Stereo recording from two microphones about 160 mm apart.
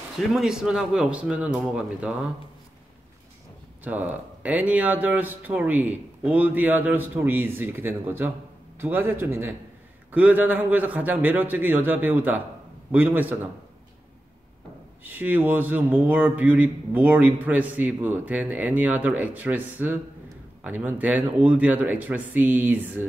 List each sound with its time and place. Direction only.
0.2 s a man's voice: centre (ahead or behind)
3.8 s a man's voice: 10° right (ahead or behind)
15.0 s a man's voice: 10° right (ahead or behind)